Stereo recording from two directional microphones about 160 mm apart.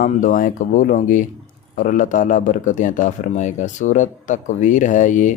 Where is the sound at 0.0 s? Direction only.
55° left (ahead or behind).